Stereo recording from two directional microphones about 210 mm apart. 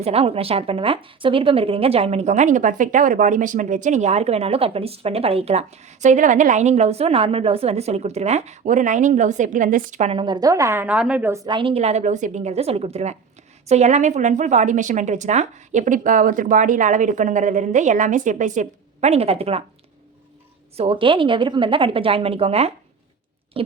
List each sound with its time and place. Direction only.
0.0 s a woman's voice: 30° right (ahead or behind)
20.7 s a woman's voice: 25° right (ahead or behind)